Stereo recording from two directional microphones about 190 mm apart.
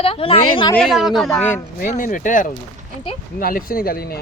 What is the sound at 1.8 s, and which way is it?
Speech, 40° left (ahead or behind).